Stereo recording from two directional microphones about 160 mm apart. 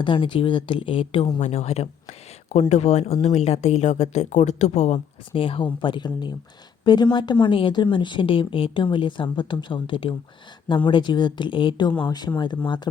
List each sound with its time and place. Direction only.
0.0 s a woman's voice: 30° left (ahead or behind)